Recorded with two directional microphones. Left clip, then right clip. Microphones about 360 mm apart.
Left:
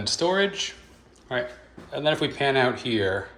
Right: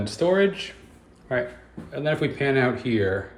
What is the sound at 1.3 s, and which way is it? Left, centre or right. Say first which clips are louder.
Speech: right 2 dB; centre.